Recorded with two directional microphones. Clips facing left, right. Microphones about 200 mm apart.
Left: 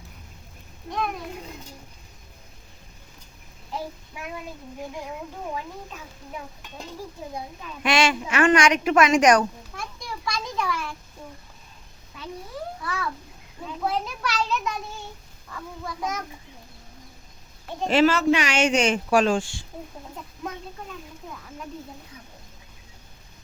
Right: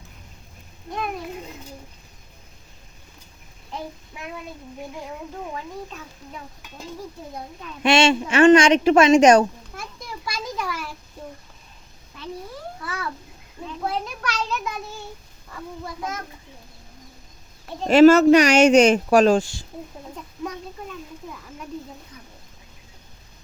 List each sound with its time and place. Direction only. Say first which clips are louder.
7.9 s a woman's voice: right 5 dB; 25° right (ahead or behind)
10.2 s a child's voice: left 1 dB; 5° right (ahead or behind)
12.8 s a child's voice: right 2 dB; centre (ahead or behind)
17.8 s speech: right 8 dB; 45° right (ahead or behind)